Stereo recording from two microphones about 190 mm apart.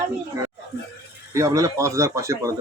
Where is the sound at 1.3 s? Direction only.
15° right (ahead or behind).